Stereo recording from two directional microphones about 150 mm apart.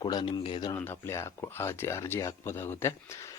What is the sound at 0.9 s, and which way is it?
Speech, 15° left (ahead or behind).